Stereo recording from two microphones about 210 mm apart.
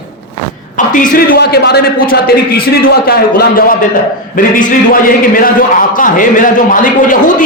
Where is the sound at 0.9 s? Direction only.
40° left (ahead or behind).